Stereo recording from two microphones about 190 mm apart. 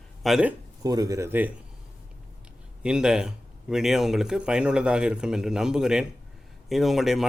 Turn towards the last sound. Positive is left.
turn(degrees=0)  # may be behind; listen again after turning